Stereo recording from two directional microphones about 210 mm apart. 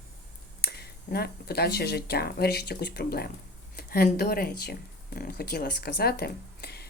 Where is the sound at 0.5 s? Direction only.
50° left (ahead or behind).